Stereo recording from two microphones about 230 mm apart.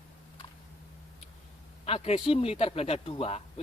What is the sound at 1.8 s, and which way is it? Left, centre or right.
Speech, left.